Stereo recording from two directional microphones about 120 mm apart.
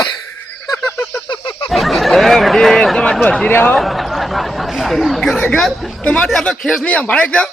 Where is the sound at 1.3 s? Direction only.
45° left (ahead or behind).